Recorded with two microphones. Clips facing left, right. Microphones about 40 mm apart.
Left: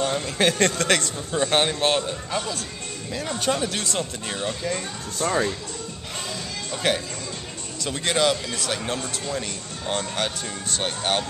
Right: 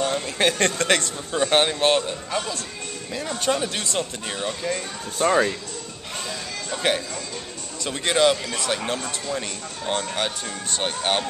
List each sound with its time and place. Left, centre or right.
0.0 s a man's voice: centre
5.2 s speech: right
6.8 s speech: centre